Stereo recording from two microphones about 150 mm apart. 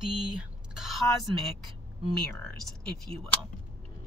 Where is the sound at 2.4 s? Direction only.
5° left (ahead or behind).